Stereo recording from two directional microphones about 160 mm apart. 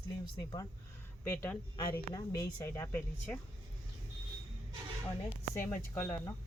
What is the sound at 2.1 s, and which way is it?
Speech, 25° left (ahead or behind).